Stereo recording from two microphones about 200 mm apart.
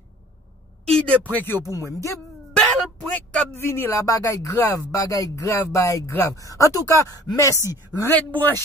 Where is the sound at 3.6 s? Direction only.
10° left (ahead or behind).